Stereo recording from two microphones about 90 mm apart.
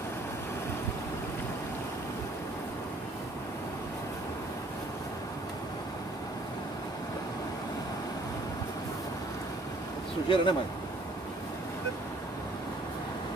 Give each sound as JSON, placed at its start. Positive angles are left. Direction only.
{"t": 10.2, "sound": "speech", "side_deg": 70}